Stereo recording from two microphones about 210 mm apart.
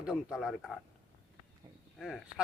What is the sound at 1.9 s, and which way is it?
Speech, centre (ahead or behind).